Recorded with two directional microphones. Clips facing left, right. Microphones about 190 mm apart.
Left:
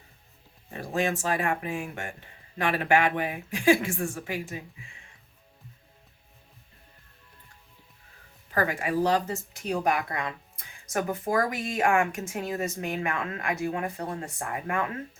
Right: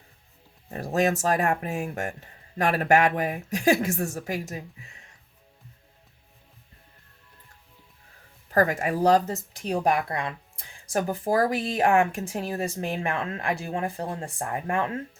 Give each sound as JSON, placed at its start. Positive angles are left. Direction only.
{"t": 0.7, "sound": "speech", "side_deg": -40}
{"t": 8.4, "sound": "speech", "side_deg": -40}